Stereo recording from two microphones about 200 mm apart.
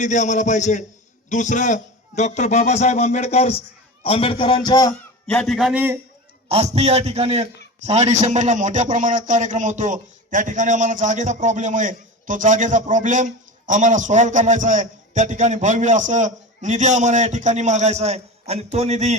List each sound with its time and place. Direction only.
0.0 s a man's voice: 35° left (ahead or behind); by 4.9 s 20° left (ahead or behind)
5.2 s a man's voice: 5° left (ahead or behind)
6.5 s a man's voice: 30° right (ahead or behind)